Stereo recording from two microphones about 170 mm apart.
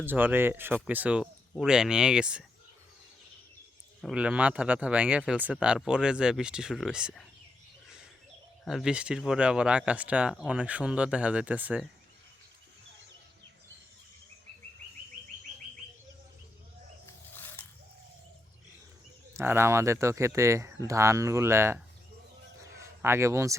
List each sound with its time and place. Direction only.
0.0 s speech: 10° right (ahead or behind)
4.0 s speech: 5° right (ahead or behind)
8.6 s speech: centre (ahead or behind)
17.1 s wild animals: 15° left (ahead or behind)
19.3 s speech: 15° right (ahead or behind)
22.6 s a sound: 15° right (ahead or behind)